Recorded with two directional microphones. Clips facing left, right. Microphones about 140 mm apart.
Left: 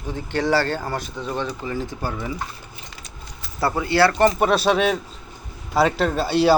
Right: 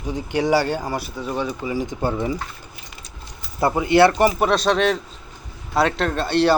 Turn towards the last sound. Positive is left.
turn(degrees=5)  # may be behind; listen again after turning